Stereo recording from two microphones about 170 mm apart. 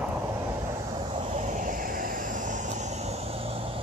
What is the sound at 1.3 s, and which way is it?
Vehicle, 45° right (ahead or behind).